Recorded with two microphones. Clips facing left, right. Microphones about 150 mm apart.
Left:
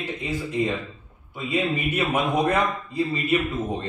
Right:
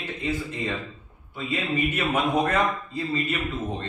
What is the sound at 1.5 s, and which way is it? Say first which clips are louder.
A man's voice: left 2 dB; 10° left (ahead or behind).